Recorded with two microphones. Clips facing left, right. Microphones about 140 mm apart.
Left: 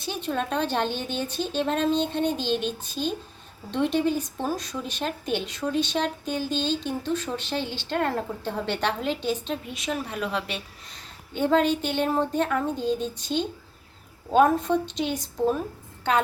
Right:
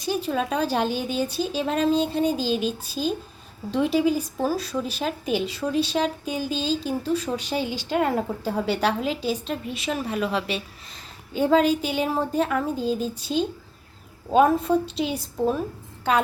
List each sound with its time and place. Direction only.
0.0 s speech: 5° right (ahead or behind)